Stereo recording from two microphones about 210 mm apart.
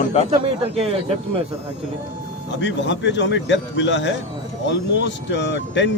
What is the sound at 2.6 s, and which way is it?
Speech, 60° left (ahead or behind).